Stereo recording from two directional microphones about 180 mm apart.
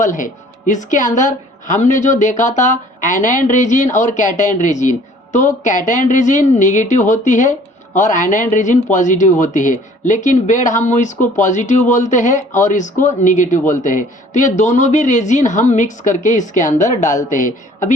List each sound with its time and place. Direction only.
0.0 s speech: 45° left (ahead or behind)